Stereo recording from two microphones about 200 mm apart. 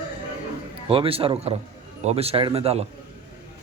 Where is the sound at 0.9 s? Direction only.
30° right (ahead or behind).